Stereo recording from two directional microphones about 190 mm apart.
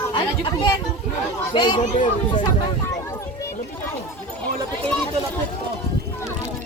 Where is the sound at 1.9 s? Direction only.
40° left (ahead or behind).